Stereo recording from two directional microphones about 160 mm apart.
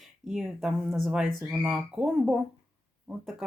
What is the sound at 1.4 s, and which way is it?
Speech, 15° right (ahead or behind).